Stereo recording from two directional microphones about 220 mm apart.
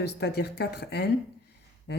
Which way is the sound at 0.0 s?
50° left (ahead or behind).